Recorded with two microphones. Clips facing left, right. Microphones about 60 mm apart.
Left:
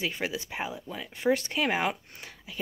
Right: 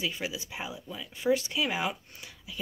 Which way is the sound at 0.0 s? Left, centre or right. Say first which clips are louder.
Left 2 dB; left.